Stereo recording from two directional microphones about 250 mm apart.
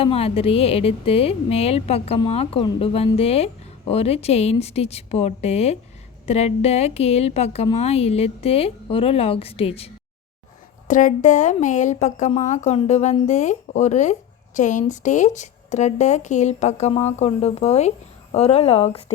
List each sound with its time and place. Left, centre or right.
0.0 s speech: left